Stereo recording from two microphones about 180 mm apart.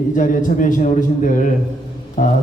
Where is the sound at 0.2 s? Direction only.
45° left (ahead or behind).